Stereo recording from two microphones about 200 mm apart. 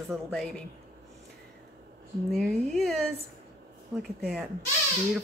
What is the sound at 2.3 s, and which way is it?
Speech, centre (ahead or behind).